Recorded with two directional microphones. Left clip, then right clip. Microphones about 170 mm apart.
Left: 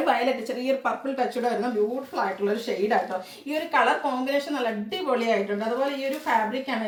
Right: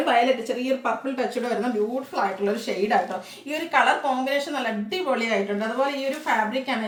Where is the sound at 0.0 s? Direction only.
15° right (ahead or behind).